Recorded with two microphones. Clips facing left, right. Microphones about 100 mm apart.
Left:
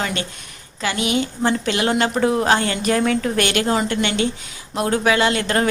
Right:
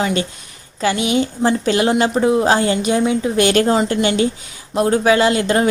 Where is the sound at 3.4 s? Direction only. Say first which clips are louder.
Right 8 dB; 30° right (ahead or behind).